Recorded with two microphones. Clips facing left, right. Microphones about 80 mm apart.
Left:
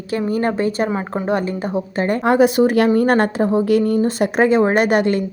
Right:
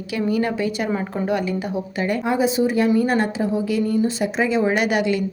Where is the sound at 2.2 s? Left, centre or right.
Left.